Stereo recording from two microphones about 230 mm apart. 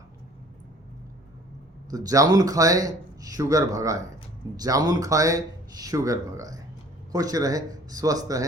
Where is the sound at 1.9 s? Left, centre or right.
Centre.